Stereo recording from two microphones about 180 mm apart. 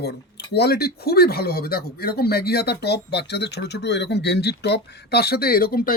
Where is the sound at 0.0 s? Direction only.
65° left (ahead or behind).